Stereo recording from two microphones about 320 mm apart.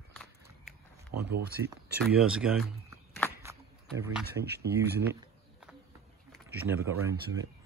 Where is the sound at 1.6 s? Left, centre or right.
Right.